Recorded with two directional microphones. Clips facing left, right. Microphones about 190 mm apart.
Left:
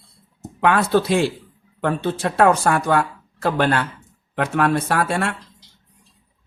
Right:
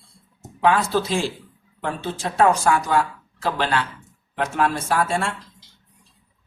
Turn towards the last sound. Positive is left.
turn(degrees=65)  # may be behind; listen again after turning